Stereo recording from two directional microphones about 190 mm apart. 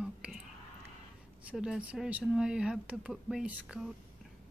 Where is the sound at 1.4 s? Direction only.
5° right (ahead or behind).